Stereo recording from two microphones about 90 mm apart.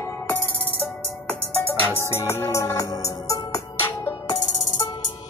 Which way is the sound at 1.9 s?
30° left (ahead or behind).